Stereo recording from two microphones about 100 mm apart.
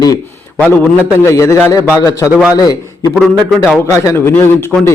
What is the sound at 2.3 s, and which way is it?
Speech, 10° right (ahead or behind).